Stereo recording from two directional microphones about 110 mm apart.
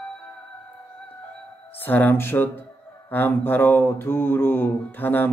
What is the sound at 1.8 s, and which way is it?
Mantra, 15° left (ahead or behind).